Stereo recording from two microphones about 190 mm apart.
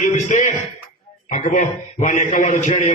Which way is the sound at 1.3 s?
40° left (ahead or behind).